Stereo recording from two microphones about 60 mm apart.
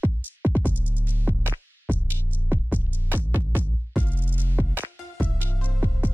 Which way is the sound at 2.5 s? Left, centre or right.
Right.